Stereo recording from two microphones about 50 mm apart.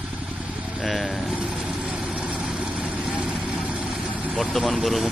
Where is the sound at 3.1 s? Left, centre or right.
Right.